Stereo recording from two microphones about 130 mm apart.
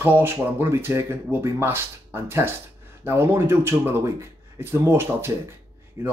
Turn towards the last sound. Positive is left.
turn(degrees=-20)  # may be behind; listen again after turning